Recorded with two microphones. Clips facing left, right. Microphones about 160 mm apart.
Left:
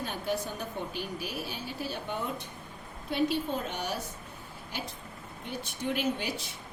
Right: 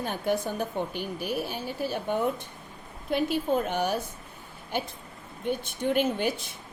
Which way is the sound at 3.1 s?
55° right (ahead or behind).